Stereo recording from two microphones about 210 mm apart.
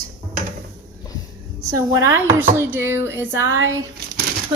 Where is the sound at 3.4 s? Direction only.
70° right (ahead or behind).